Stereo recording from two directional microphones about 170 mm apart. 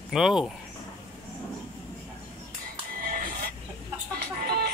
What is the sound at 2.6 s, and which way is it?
Music, 60° right (ahead or behind).